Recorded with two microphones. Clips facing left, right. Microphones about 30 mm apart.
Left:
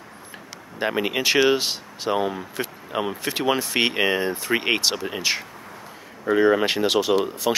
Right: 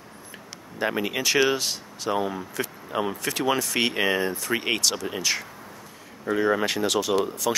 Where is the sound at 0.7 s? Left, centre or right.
Centre.